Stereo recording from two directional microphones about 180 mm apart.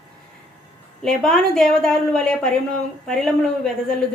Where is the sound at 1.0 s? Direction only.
5° left (ahead or behind).